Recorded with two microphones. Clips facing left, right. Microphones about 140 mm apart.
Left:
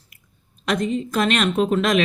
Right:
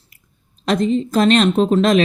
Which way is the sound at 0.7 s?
30° right (ahead or behind).